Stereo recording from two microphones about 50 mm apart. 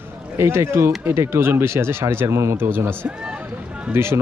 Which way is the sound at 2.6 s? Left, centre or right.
Right.